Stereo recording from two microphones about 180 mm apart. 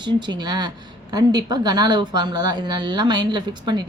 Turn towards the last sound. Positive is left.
turn(degrees=-25)  # may be behind; listen again after turning